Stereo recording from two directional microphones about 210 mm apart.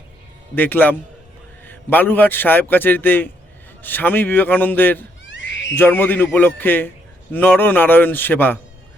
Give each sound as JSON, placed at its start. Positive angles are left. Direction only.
{"t": 0.5, "sound": "a man's voice", "side_deg": 10}
{"t": 5.2, "sound": "owl", "side_deg": 60}
{"t": 5.7, "sound": "a man's voice", "side_deg": 10}